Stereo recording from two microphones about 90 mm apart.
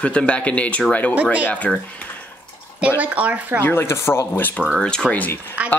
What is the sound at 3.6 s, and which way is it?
Speech, 30° left (ahead or behind).